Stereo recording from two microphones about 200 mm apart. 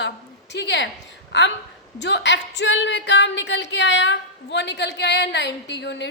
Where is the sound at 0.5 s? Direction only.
60° left (ahead or behind).